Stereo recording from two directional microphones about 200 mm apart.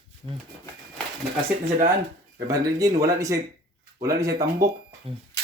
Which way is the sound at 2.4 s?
15° right (ahead or behind).